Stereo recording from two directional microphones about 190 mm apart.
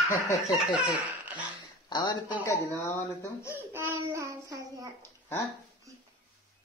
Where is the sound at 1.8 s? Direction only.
20° left (ahead or behind).